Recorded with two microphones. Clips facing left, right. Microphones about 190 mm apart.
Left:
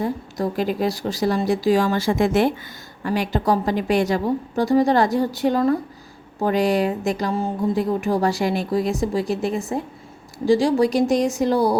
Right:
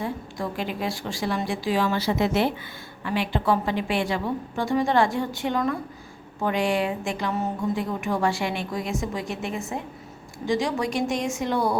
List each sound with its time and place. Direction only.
0.0 s speech: 40° left (ahead or behind)